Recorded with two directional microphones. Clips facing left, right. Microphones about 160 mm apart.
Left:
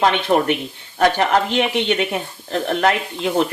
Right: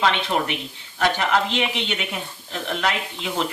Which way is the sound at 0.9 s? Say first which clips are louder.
Left 5 dB; 50° left (ahead or behind).